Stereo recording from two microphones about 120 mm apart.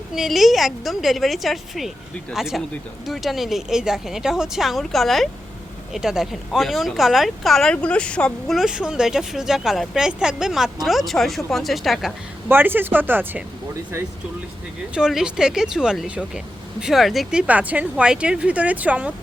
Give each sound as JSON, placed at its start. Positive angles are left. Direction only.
{"t": 0.1, "sound": "speech", "side_deg": 0}
{"t": 8.5, "sound": "speech", "side_deg": -5}
{"t": 12.5, "sound": "speech", "side_deg": -15}
{"t": 14.9, "sound": "speech", "side_deg": -5}
{"t": 17.4, "sound": "speech", "side_deg": -10}